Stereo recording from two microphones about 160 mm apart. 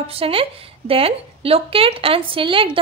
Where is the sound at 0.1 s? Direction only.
35° right (ahead or behind).